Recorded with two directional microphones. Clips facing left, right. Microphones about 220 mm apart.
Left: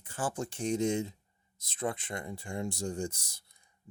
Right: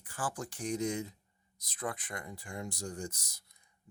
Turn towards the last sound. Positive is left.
turn(degrees=30)  # may be behind; listen again after turning